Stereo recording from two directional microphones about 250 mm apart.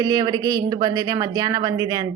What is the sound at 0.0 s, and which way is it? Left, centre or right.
A woman's voice, centre.